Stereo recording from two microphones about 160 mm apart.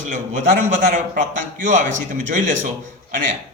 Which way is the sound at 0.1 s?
55° right (ahead or behind).